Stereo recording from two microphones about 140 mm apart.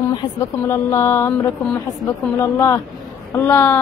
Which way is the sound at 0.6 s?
15° left (ahead or behind).